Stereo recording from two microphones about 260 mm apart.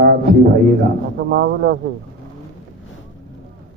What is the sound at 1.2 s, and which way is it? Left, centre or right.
Mantra, right.